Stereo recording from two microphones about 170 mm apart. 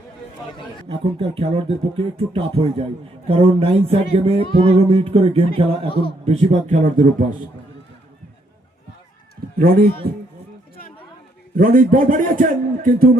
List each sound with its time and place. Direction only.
1.4 s speech: 35° right (ahead or behind)
9.6 s a man's voice: 60° right (ahead or behind)
11.5 s a man's voice: 55° right (ahead or behind)